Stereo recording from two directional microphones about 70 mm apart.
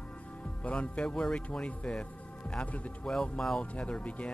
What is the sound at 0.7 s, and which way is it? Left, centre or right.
Speech, centre.